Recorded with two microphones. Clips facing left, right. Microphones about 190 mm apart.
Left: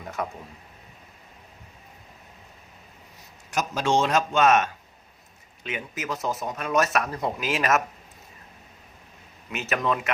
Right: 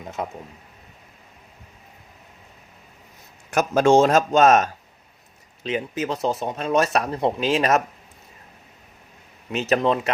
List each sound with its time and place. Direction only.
0.0 s a man's voice: 25° right (ahead or behind)
3.5 s speech: 55° right (ahead or behind); by 7.8 s 30° right (ahead or behind)
9.5 s speech: 30° right (ahead or behind)